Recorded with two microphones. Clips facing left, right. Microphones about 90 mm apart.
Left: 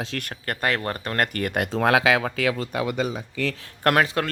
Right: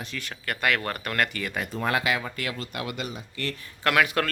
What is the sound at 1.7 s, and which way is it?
Speech, 90° left.